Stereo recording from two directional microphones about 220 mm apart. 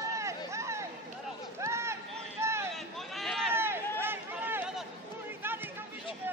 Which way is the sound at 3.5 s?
10° right (ahead or behind).